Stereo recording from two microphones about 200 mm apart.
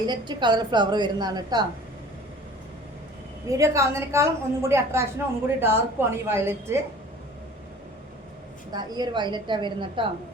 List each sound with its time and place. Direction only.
0.0 s a woman's voice: 20° right (ahead or behind)
3.5 s a woman's voice: 15° right (ahead or behind)
8.7 s a woman's voice: 20° right (ahead or behind)